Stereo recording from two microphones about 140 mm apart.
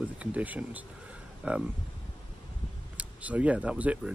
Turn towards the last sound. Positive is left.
turn(degrees=-10)  # may be behind; listen again after turning